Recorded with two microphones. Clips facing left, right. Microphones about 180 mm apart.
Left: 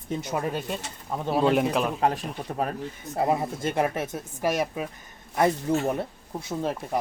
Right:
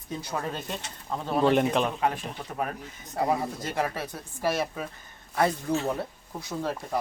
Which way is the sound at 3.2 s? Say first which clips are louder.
Left 2 dB; 25° left (ahead or behind).